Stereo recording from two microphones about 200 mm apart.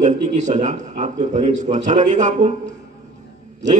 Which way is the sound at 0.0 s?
35° right (ahead or behind).